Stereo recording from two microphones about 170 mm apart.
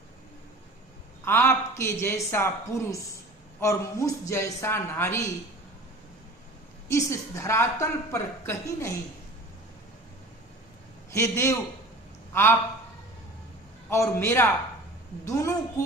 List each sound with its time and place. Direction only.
1.2 s a woman's voice: 15° left (ahead or behind)
6.9 s a woman's voice: 15° left (ahead or behind)
11.1 s a woman's voice: 15° left (ahead or behind)
13.9 s a woman's voice: 15° left (ahead or behind)